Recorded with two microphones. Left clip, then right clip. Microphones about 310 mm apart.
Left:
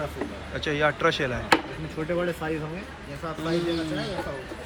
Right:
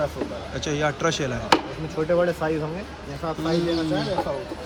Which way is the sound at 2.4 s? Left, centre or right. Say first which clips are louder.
Right 5 dB; right.